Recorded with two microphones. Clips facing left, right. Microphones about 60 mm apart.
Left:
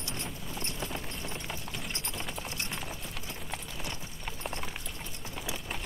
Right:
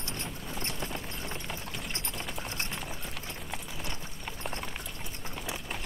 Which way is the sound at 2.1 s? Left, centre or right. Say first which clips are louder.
Even; centre.